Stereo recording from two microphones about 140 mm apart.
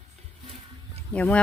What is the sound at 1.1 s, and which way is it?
Speech, 10° left (ahead or behind).